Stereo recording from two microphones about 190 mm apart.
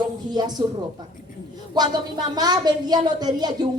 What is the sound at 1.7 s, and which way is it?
Speech, 20° right (ahead or behind).